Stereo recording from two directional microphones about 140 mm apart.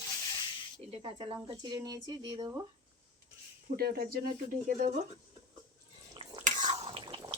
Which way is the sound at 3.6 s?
90° right.